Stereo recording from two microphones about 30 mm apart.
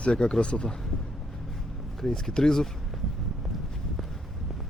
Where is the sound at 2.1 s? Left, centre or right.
Left.